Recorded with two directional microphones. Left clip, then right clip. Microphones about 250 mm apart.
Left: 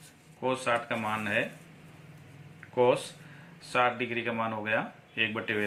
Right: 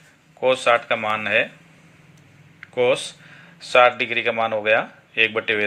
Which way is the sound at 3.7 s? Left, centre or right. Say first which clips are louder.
Right 12 dB; right.